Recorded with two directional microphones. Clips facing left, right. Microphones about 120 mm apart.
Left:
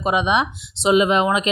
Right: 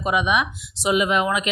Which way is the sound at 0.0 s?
25° left (ahead or behind).